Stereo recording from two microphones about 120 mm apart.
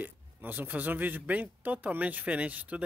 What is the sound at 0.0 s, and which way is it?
Speech, 15° right (ahead or behind).